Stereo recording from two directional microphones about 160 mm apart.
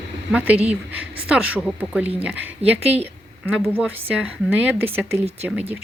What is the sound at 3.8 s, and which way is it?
A woman's voice, 5° right (ahead or behind).